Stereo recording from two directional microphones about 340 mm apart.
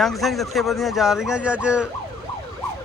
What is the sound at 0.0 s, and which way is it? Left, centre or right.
A man's voice, centre.